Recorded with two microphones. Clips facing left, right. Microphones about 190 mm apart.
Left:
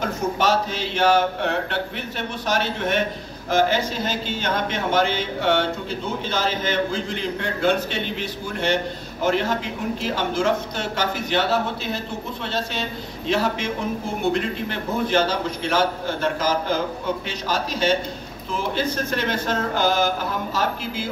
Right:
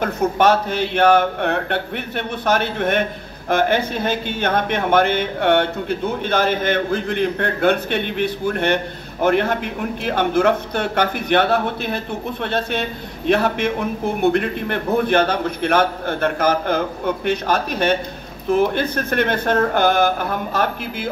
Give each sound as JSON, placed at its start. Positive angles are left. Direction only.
{"t": 0.0, "sound": "a man's voice", "side_deg": -60}